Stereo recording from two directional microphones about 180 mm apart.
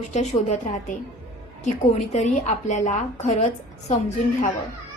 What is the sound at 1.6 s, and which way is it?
A woman's voice, 40° left (ahead or behind).